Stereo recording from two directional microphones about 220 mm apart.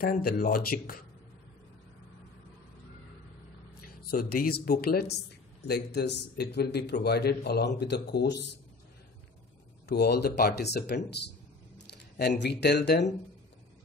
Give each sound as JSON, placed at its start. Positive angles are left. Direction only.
{"t": 0.0, "sound": "a man's voice", "side_deg": 40}
{"t": 4.0, "sound": "a man's voice", "side_deg": 45}
{"t": 9.8, "sound": "a man's voice", "side_deg": 45}